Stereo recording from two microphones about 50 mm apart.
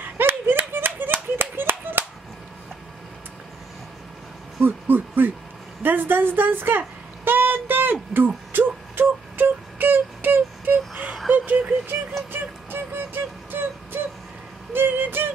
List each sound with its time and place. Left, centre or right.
0.2 s clapping: right
4.6 s a woman's voice: right
7.2 s a sound: right
12.3 s music: right
14.7 s music: right